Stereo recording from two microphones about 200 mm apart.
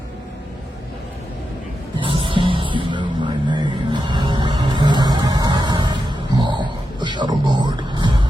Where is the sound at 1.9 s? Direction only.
25° right (ahead or behind).